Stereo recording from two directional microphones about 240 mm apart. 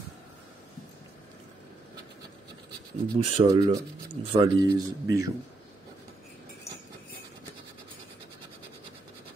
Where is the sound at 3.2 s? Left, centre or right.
Right.